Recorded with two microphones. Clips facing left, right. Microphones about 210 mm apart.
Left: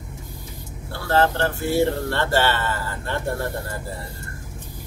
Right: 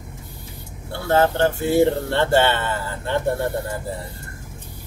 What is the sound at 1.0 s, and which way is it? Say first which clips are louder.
Speech: right 3 dB; 20° right (ahead or behind).